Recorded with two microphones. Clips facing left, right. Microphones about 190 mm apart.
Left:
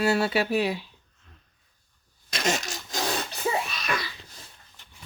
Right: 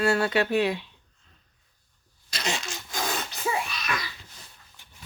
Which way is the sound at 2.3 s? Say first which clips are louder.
Left 4 dB; 45° left (ahead or behind).